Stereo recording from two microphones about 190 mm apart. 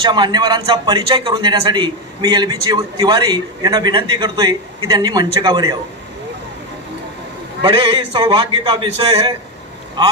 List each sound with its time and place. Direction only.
0.0 s a man's voice: 25° right (ahead or behind)
7.6 s a man's voice: 30° right (ahead or behind)